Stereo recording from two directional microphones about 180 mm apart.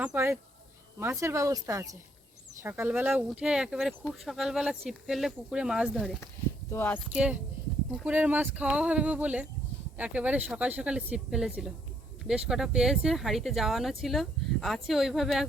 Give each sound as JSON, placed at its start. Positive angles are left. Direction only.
{"t": 0.0, "sound": "speech", "side_deg": -10}
{"t": 6.7, "sound": "speech", "side_deg": 10}
{"t": 7.9, "sound": "speech", "side_deg": -5}